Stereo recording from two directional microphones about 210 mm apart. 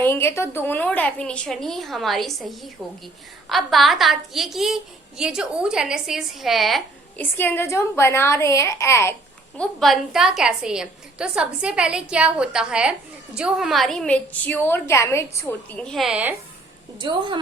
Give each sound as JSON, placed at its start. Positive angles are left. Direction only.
{"t": 0.0, "sound": "a woman's voice", "side_deg": 10}
{"t": 3.5, "sound": "a woman's voice", "side_deg": 0}
{"t": 9.6, "sound": "a woman's voice", "side_deg": 0}
{"t": 17.0, "sound": "a woman's voice", "side_deg": -20}